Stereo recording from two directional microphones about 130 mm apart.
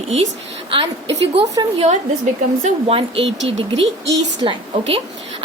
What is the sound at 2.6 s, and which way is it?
A woman's voice, 50° right (ahead or behind).